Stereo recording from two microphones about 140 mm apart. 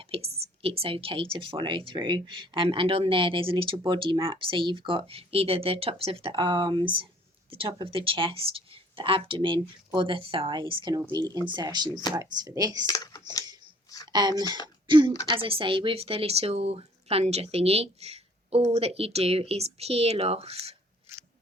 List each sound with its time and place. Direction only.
0.0 s a woman's voice: 45° right (ahead or behind); by 12.8 s 25° right (ahead or behind)
12.8 s speech: 25° left (ahead or behind)
14.1 s a woman's voice: 30° right (ahead or behind); by 20.7 s 45° right (ahead or behind)